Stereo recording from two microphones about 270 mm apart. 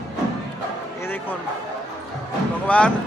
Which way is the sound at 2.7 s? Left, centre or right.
Centre.